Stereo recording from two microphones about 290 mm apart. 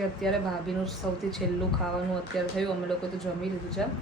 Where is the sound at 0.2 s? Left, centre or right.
Centre.